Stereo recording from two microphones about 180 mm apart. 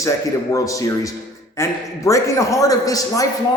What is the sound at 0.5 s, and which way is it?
A man's voice, 20° left (ahead or behind).